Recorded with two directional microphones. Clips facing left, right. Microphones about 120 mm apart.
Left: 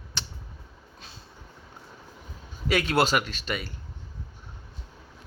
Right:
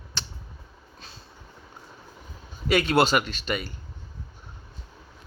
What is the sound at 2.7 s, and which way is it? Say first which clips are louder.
Speech: right 3 dB; centre (ahead or behind).